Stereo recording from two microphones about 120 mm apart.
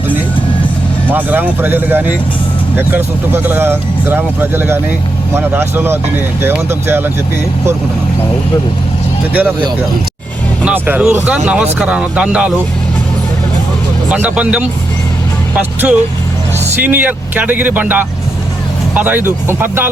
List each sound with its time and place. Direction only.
1.0 s speech: 15° right (ahead or behind)
10.7 s speech: 10° right (ahead or behind)
14.1 s speech: 10° right (ahead or behind)